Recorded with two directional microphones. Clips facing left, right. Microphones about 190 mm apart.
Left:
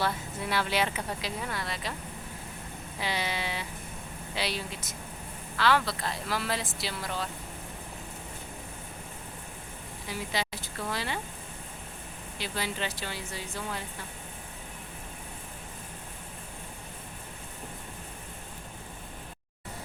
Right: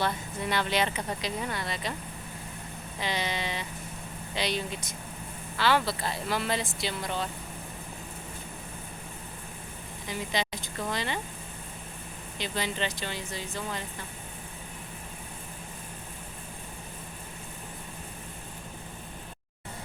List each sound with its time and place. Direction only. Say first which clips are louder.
0.0 s speech: right 1 dB; 5° left (ahead or behind)
3.0 s speech: right 1 dB; 10° left (ahead or behind)
10.1 s speech: right 2 dB; 5° left (ahead or behind)
12.4 s speech: right 2 dB; 5° left (ahead or behind)